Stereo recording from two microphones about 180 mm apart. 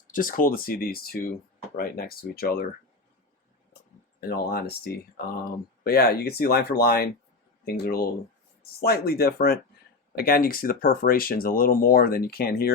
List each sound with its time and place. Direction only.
0.1 s speech: 50° left (ahead or behind)
4.2 s speech: 60° left (ahead or behind)